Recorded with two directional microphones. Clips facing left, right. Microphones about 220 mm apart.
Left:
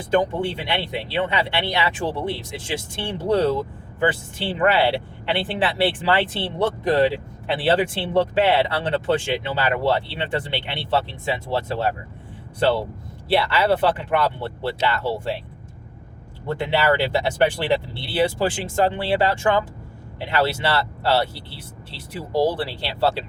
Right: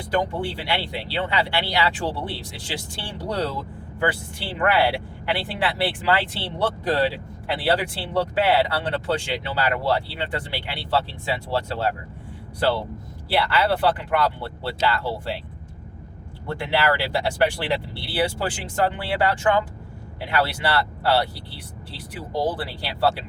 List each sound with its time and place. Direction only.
0.1 s speech: 25° left (ahead or behind)
13.2 s speech: 25° left (ahead or behind)
16.6 s speech: 25° left (ahead or behind)
22.4 s speech: 25° left (ahead or behind)